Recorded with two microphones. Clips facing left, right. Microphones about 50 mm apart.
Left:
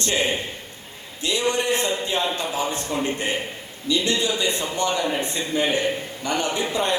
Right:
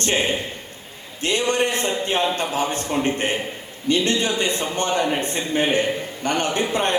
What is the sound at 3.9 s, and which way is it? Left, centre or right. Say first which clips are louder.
A man's voice: right 2 dB; right.